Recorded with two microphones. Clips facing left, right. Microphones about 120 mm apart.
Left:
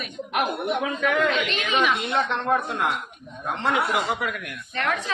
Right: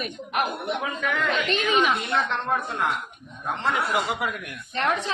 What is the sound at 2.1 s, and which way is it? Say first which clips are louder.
Speech: left 2 dB; 5° left (ahead or behind).